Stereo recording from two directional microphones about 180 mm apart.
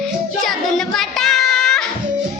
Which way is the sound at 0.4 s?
Centre (ahead or behind).